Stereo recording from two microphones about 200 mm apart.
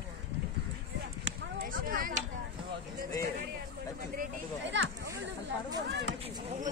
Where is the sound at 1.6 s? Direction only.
45° right (ahead or behind).